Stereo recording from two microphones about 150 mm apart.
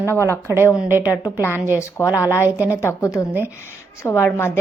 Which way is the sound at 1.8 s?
20° left (ahead or behind).